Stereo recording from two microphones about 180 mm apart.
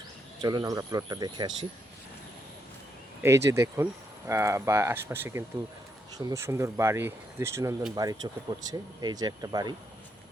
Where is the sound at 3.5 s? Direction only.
15° right (ahead or behind).